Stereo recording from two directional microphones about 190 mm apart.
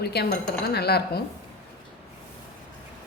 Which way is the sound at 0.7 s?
55° left (ahead or behind).